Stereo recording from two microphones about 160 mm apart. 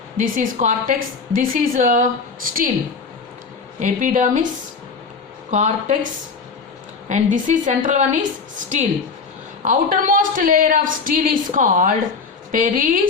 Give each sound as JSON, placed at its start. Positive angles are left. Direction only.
{"t": 0.2, "sound": "a woman's voice", "side_deg": -55}
{"t": 3.8, "sound": "a woman's voice", "side_deg": -50}
{"t": 5.5, "sound": "a woman's voice", "side_deg": -45}
{"t": 7.1, "sound": "a woman's voice", "side_deg": -50}